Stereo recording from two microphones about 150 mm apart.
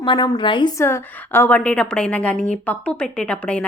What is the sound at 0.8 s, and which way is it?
A woman's voice, 15° left (ahead or behind).